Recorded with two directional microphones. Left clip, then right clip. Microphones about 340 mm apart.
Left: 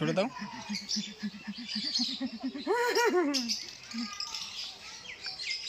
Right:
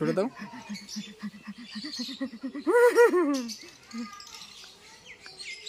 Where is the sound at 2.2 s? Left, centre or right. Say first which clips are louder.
Right 4 dB; centre.